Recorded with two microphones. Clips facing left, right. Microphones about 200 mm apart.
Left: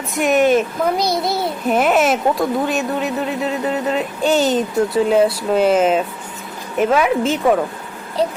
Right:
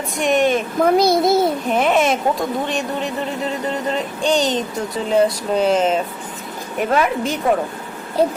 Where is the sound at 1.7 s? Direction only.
5° left (ahead or behind).